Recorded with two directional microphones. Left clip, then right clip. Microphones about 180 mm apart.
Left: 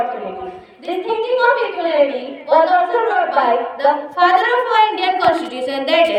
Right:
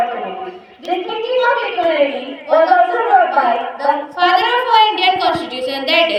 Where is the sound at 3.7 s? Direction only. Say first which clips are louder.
Left 1 dB; 15° left (ahead or behind).